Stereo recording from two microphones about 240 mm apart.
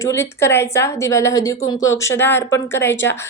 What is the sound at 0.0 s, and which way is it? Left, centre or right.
A woman's voice, centre.